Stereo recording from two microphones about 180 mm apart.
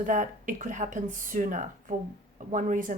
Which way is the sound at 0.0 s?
45° right (ahead or behind).